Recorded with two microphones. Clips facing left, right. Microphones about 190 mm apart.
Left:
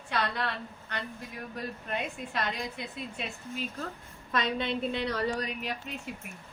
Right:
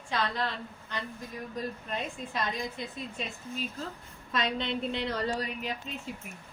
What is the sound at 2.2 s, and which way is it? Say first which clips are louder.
Speech: even; 60° left (ahead or behind).